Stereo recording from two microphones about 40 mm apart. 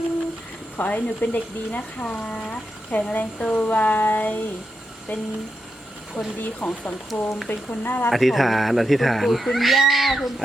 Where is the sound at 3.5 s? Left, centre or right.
Left.